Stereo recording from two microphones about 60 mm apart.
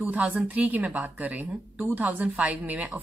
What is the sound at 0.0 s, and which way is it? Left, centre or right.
Speech, right.